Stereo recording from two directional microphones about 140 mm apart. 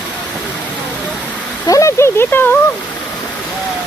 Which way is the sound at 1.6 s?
25° left (ahead or behind).